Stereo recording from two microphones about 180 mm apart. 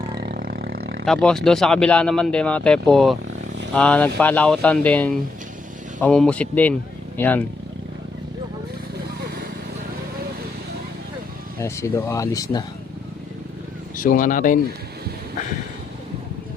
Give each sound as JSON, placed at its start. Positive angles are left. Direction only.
{"t": 0.0, "sound": "roar", "side_deg": -65}
{"t": 1.0, "sound": "speech", "side_deg": 5}
{"t": 11.6, "sound": "speech", "side_deg": 15}
{"t": 13.9, "sound": "speech", "side_deg": 50}